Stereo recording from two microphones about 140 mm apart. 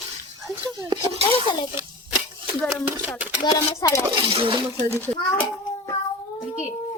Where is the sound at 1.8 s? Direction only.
20° right (ahead or behind).